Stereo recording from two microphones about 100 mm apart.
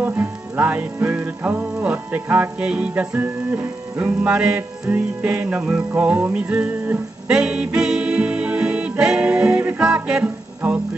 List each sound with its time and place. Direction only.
0.0 s music: 20° right (ahead or behind)
4.3 s music: 10° right (ahead or behind)